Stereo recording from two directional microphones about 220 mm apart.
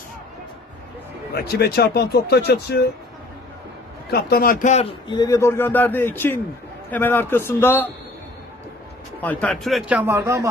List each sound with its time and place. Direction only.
1.4 s speech: 45° left (ahead or behind)
4.1 s a man's voice: 45° left (ahead or behind); by 7.9 s 10° left (ahead or behind)
9.2 s a man's voice: 5° left (ahead or behind); by 10.5 s 15° right (ahead or behind)